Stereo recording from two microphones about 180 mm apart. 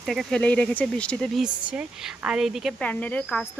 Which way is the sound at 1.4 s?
5° right (ahead or behind).